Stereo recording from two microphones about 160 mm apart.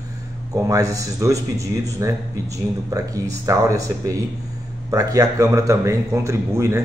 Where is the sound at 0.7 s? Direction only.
20° right (ahead or behind).